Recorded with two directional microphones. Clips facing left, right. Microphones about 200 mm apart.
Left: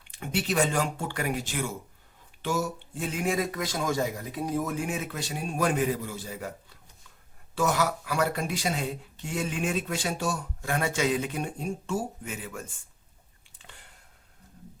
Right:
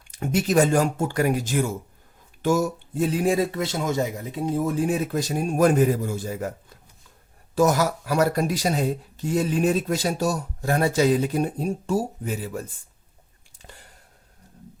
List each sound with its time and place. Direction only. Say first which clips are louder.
0.1 s speech: right 7 dB; 45° right (ahead or behind)